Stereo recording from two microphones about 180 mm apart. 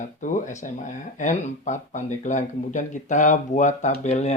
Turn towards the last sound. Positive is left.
turn(degrees=40)  # may be behind; listen again after turning